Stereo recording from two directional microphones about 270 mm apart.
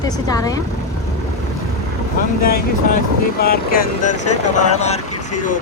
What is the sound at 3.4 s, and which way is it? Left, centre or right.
Speech, left.